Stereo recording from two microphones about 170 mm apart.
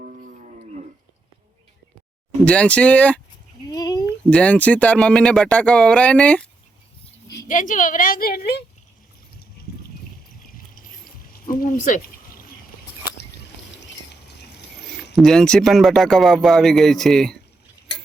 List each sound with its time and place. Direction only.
0.0 s livestock: 50° right (ahead or behind)
2.4 s speech: 5° left (ahead or behind)
3.7 s a sound: 20° left (ahead or behind)
4.3 s speech: 10° left (ahead or behind)
7.4 s a woman's voice: 50° left (ahead or behind); by 8.6 s 65° left (ahead or behind)
9.6 s a sound: 65° left (ahead or behind)
11.4 s speech: 55° left (ahead or behind)
14.8 s speech: centre (ahead or behind)